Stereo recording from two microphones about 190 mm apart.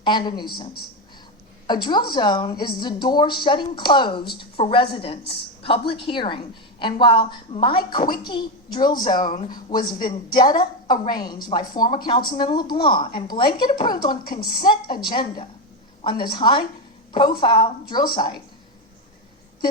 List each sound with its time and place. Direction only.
0.0 s a woman's voice: 25° left (ahead or behind)
1.6 s a woman's voice: 25° left (ahead or behind)
8.0 s speech: 50° left (ahead or behind)
8.3 s a woman's voice: 25° left (ahead or behind)